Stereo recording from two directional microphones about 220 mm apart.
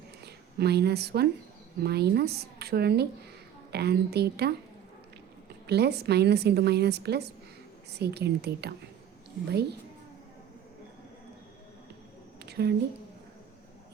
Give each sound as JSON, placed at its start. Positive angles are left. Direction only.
{"t": 0.3, "sound": "a woman's voice", "side_deg": -45}
{"t": 5.6, "sound": "a woman's voice", "side_deg": -50}
{"t": 12.4, "sound": "a sound", "side_deg": -45}